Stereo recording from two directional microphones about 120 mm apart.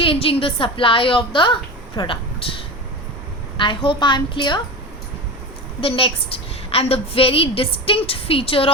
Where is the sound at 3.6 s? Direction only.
40° left (ahead or behind).